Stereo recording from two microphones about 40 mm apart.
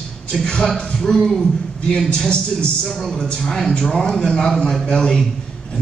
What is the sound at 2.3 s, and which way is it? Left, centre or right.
Speech, left.